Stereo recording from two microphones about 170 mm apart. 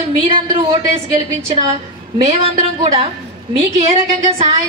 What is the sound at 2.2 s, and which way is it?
Speech, 35° right (ahead or behind).